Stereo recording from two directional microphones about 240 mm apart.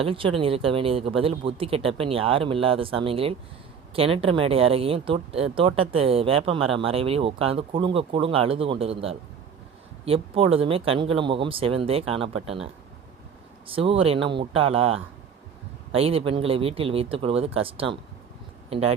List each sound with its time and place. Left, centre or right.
0.0 s speech: right